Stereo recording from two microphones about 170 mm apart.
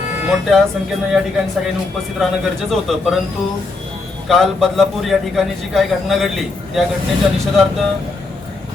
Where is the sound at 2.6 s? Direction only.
Centre (ahead or behind).